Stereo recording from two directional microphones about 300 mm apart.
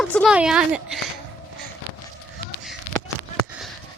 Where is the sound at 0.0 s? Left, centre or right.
Centre.